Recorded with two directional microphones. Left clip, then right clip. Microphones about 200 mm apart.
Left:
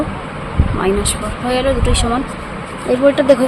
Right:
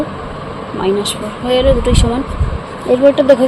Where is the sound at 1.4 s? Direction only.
10° right (ahead or behind).